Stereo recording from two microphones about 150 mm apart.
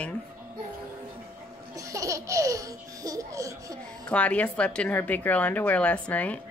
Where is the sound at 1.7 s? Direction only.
20° right (ahead or behind).